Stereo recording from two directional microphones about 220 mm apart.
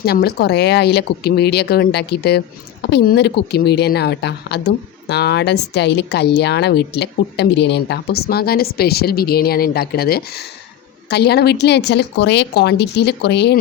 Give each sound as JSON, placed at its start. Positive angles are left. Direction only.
{"t": 0.0, "sound": "speech", "side_deg": 45}